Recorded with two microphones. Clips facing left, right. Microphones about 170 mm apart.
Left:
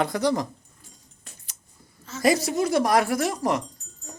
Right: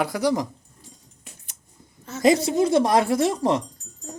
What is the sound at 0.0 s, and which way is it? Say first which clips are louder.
Speech: right 1 dB; 10° right (ahead or behind).